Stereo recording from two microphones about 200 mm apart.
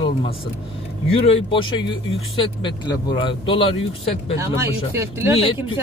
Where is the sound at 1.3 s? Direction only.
25° left (ahead or behind).